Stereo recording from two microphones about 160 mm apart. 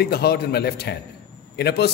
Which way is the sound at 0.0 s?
80° left.